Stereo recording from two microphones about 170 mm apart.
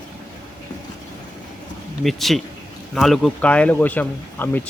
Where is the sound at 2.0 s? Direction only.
Centre (ahead or behind).